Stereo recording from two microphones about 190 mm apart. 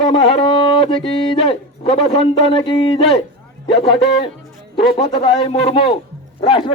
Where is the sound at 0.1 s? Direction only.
30° left (ahead or behind).